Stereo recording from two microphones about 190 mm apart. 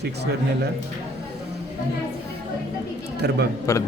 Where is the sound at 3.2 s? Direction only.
60° right (ahead or behind).